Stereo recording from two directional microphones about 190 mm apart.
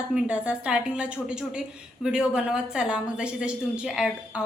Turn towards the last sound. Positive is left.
turn(degrees=-5)  # may be behind; listen again after turning